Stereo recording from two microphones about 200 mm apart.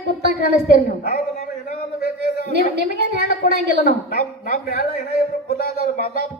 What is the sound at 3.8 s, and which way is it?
A man's voice, 45° left (ahead or behind).